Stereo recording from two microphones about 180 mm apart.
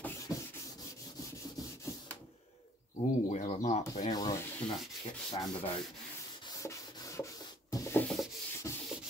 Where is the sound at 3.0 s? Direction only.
40° left (ahead or behind).